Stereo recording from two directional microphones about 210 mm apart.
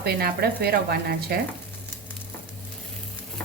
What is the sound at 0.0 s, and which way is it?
A woman's voice, 45° right (ahead or behind).